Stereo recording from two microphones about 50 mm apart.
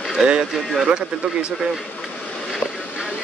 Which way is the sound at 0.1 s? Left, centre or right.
Centre.